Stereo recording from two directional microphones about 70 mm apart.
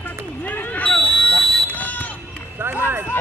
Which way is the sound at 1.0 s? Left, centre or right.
Centre.